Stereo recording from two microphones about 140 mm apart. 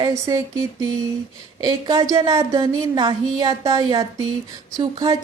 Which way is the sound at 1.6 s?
30° right (ahead or behind).